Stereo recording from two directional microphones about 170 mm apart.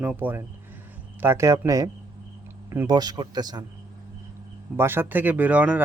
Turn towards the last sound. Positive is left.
turn(degrees=-10)  # may be behind; listen again after turning